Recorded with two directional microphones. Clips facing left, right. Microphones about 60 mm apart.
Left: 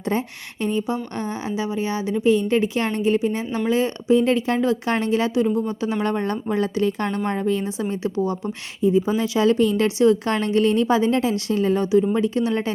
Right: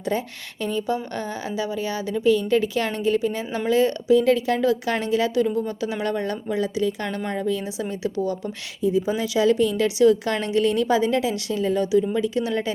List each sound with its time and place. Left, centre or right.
0.0 s a woman's voice: left
8.8 s a woman's voice: left